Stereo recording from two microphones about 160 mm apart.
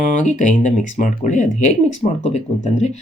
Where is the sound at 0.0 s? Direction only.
50° left (ahead or behind).